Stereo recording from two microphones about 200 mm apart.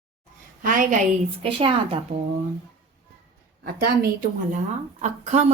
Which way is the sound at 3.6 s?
50° right (ahead or behind).